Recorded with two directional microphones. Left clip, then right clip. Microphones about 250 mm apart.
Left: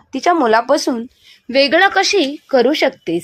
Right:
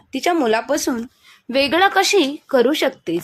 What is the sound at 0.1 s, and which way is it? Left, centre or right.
A woman's voice, centre.